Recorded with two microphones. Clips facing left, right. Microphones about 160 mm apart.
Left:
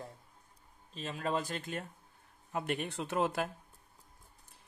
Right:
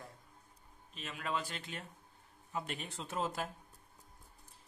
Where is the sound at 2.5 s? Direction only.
60° left (ahead or behind).